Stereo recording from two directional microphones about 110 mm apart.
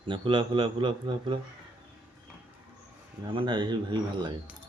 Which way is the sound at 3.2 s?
45° right (ahead or behind).